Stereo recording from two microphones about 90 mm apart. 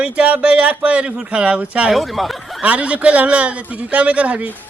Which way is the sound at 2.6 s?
15° right (ahead or behind).